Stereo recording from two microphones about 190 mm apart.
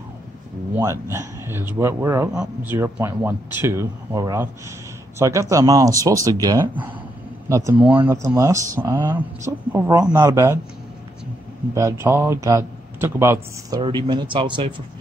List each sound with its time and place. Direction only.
0.7 s a man's voice: 15° right (ahead or behind)
11.7 s a man's voice: 15° right (ahead or behind)